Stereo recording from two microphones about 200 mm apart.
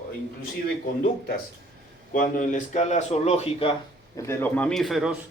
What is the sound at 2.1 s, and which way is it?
A man's voice, 40° left (ahead or behind).